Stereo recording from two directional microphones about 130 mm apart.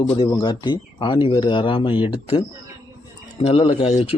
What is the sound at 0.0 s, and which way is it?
Speech, 45° left (ahead or behind).